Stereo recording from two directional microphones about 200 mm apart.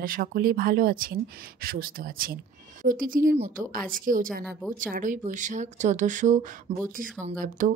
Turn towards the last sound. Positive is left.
turn(degrees=-40)  # may be behind; listen again after turning